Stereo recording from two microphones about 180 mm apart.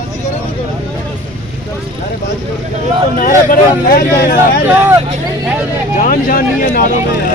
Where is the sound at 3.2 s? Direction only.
50° left (ahead or behind).